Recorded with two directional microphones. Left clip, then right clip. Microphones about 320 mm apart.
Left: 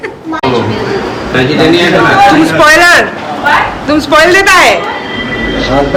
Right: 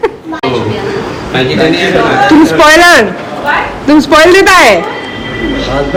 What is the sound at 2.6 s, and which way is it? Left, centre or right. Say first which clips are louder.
A man's voice: right 1 dB; centre.